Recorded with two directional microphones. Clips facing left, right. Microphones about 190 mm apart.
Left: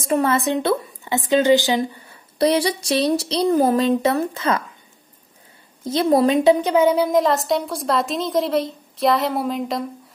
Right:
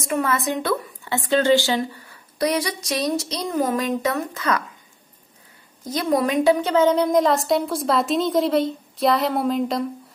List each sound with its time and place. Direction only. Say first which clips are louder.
0.0 s a woman's voice: left 4 dB; 30° left (ahead or behind)
5.9 s a woman's voice: left 5 dB; 30° left (ahead or behind); by 9.8 s centre (ahead or behind)